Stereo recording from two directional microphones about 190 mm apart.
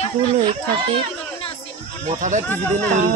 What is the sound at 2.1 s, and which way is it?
Shofar, 40° right (ahead or behind).